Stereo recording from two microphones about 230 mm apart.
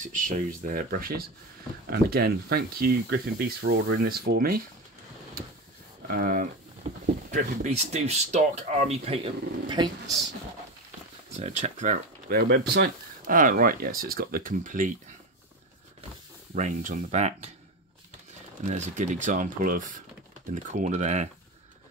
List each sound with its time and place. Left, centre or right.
0.0 s speech: right
6.0 s speech: right; by 10.2 s centre
11.3 s speech: right
16.5 s speech: right
18.7 s speech: right